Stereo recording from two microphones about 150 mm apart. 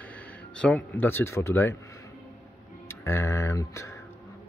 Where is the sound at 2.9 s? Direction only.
15° left (ahead or behind).